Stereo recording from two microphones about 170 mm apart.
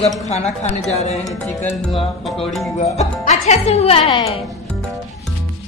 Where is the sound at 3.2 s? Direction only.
40° left (ahead or behind).